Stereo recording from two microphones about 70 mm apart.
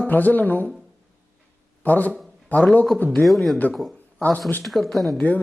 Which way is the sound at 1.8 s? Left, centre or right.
Left.